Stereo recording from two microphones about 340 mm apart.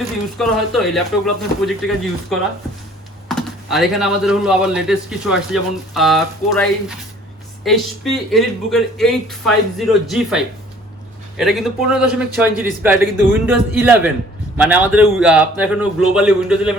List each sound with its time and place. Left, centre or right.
0.0 s speech: centre
3.2 s speech: centre